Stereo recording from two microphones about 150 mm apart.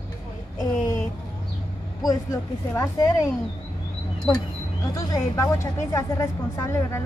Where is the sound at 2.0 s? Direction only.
20° left (ahead or behind).